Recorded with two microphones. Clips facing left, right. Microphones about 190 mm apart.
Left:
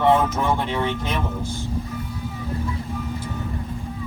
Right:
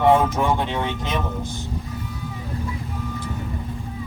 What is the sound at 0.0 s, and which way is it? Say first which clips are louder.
Speech: right 1 dB; 15° right (ahead or behind).